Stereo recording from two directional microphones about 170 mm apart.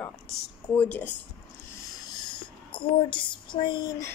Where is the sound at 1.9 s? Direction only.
25° left (ahead or behind).